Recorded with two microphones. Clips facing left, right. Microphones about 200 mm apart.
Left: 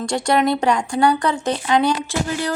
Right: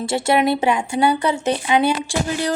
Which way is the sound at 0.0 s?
5° right (ahead or behind).